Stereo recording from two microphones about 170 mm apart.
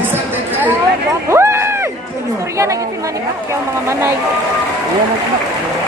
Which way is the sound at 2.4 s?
15° right (ahead or behind).